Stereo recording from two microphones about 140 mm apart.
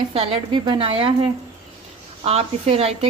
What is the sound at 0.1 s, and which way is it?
A woman's voice, 40° right (ahead or behind).